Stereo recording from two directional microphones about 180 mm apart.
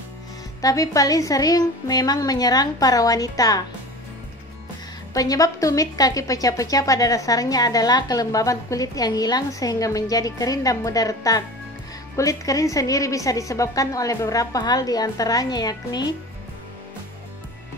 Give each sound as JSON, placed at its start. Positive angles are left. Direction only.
{"t": 0.6, "sound": "speech", "side_deg": 20}
{"t": 5.1, "sound": "speech", "side_deg": 20}